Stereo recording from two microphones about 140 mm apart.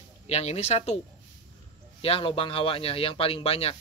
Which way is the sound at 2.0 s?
40° left (ahead or behind).